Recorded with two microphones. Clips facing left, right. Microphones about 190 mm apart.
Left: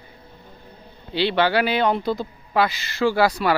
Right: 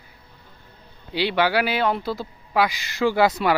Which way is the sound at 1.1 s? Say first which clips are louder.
Left 1 dB; 10° right (ahead or behind).